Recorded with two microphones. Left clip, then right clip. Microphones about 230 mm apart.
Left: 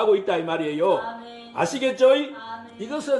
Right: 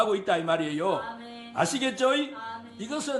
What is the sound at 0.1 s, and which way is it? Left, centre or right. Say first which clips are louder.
Speech: left 4 dB; right.